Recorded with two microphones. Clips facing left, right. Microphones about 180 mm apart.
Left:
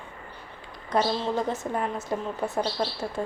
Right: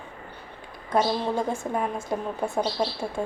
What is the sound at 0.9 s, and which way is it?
A woman's voice, 10° right (ahead or behind).